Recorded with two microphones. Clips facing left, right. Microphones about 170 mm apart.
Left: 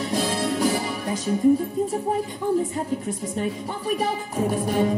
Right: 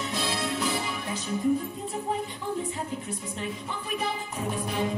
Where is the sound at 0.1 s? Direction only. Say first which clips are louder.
Left 8 dB; 45° left (ahead or behind).